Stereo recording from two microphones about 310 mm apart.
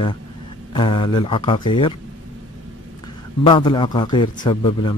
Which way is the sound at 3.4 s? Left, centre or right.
Centre.